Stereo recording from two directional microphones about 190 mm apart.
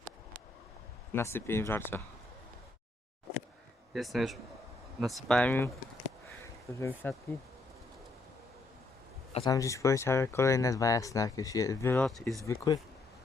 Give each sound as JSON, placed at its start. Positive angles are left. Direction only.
{"t": 1.1, "sound": "speech", "side_deg": 10}
{"t": 3.9, "sound": "speech", "side_deg": 0}
{"t": 6.4, "sound": "a sound", "side_deg": 15}
{"t": 9.3, "sound": "speech", "side_deg": 20}
{"t": 12.0, "sound": "speech", "side_deg": 0}
{"t": 12.5, "sound": "speech", "side_deg": 20}